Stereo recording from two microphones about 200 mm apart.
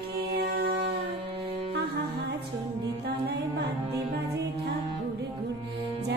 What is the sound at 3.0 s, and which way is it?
Music, 55° right (ahead or behind).